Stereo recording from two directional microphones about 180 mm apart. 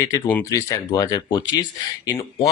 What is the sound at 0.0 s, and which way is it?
Speech, 15° left (ahead or behind).